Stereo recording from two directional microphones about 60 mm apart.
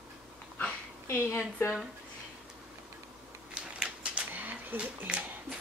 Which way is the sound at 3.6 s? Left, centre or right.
Centre.